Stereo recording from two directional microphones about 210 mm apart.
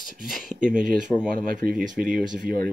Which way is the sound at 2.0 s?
40° right (ahead or behind).